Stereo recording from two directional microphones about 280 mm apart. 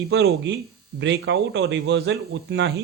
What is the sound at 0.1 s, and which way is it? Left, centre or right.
A man's voice, right.